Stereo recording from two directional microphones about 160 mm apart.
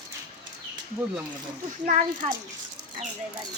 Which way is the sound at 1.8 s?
50° right (ahead or behind).